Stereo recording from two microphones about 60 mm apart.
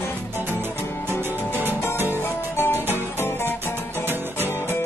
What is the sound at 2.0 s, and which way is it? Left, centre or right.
Music, left.